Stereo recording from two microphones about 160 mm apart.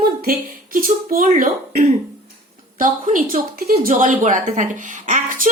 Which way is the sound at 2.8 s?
60° right (ahead or behind).